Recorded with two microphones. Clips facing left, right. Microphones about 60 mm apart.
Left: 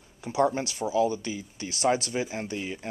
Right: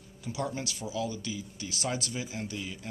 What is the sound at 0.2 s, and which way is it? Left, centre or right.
Speech, left.